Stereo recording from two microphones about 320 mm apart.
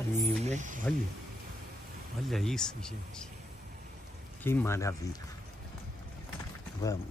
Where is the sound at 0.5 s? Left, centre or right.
Right.